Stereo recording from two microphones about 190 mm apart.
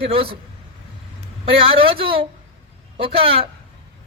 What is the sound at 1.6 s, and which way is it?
Speech, 30° right (ahead or behind).